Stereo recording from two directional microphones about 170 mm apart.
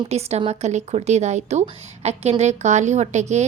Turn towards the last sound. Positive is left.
turn(degrees=-40)  # may be behind; listen again after turning